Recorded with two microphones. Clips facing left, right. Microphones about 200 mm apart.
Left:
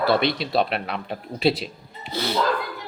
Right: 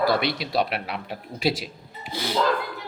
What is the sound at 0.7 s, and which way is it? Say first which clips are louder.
Speech: left 3 dB; 5° right (ahead or behind).